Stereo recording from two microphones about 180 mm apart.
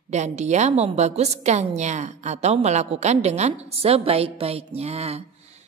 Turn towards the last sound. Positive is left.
turn(degrees=-35)  # may be behind; listen again after turning